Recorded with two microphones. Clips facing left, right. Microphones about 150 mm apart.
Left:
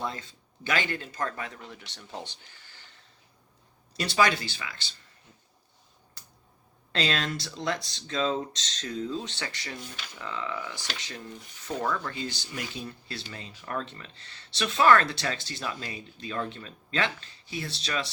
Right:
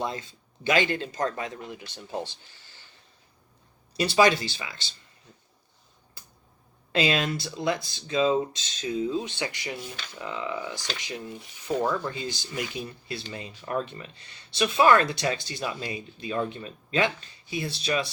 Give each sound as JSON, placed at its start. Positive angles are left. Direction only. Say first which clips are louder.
{"t": 0.0, "sound": "speech", "louder": "right 3 dB", "side_deg": -15}
{"t": 3.9, "sound": "speech", "louder": "right 4 dB", "side_deg": -20}
{"t": 6.9, "sound": "speech", "louder": "right 4 dB", "side_deg": -10}